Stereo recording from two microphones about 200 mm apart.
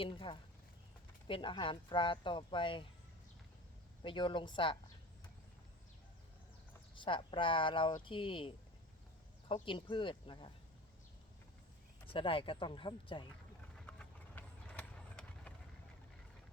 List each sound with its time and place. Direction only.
0.0 s speech: 25° left (ahead or behind)
4.0 s speech: 25° left (ahead or behind)
6.9 s speech: 25° left (ahead or behind)
12.0 s speech: 25° left (ahead or behind)
13.7 s vehicle: 5° left (ahead or behind)